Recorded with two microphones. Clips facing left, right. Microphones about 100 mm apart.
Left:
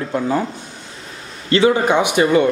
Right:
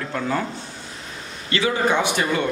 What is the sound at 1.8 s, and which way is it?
Speech, 15° left (ahead or behind).